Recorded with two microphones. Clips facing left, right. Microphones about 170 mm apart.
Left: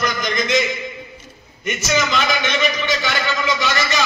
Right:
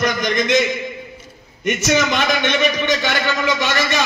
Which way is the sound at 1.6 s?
60° right (ahead or behind).